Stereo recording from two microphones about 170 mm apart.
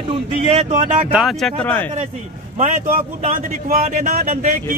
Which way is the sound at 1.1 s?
Centre (ahead or behind).